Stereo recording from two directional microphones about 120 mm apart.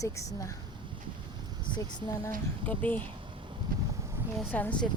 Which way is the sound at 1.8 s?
30° left (ahead or behind).